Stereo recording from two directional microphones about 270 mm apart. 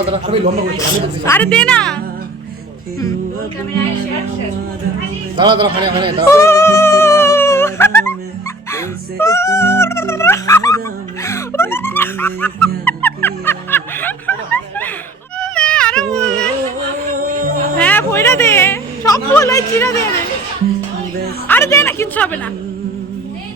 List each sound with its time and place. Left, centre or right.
0.1 s a man's voice: right
0.8 s a woman's voice: centre
5.4 s speech: centre
6.3 s music: centre
15.4 s a sound: centre
17.7 s a sound: centre
21.4 s a woman's voice: centre